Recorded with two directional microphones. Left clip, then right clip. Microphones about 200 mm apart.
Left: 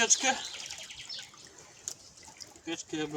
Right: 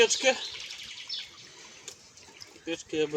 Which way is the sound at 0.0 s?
15° left (ahead or behind).